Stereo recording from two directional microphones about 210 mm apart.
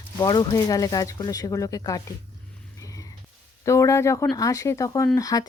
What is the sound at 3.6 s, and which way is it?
Speech, 15° left (ahead or behind).